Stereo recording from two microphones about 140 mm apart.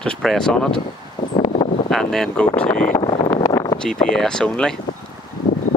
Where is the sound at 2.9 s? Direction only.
30° left (ahead or behind).